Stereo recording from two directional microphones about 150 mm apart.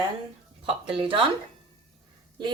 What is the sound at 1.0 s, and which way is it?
Speech, 35° right (ahead or behind).